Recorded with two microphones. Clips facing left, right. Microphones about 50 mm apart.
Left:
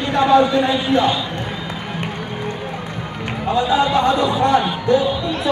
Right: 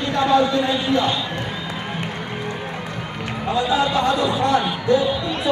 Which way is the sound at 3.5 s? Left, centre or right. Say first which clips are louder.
Left 3 dB; left.